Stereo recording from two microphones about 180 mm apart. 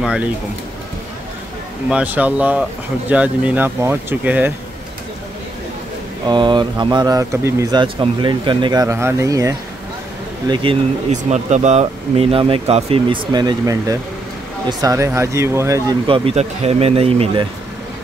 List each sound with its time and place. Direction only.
0.0 s speech: 5° right (ahead or behind)
1.9 s speech: 5° right (ahead or behind)
6.2 s speech: 25° right (ahead or behind)
10.5 s speech: 30° right (ahead or behind)
11.1 s speech: 40° right (ahead or behind); by 15.8 s 15° right (ahead or behind)
16.1 s speech: 35° right (ahead or behind)